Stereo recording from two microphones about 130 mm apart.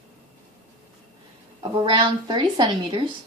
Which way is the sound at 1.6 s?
40° right (ahead or behind).